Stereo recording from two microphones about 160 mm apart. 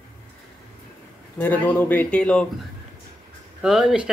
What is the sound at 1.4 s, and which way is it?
Speech, 10° left (ahead or behind).